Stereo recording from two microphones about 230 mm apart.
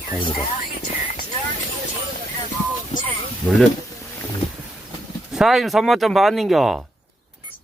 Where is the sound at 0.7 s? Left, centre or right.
Left.